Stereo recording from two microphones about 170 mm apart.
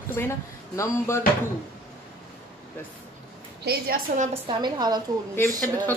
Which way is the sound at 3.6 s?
70° right (ahead or behind).